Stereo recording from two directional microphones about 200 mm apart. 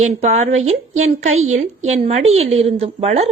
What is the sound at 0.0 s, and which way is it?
A woman's voice, 35° right (ahead or behind).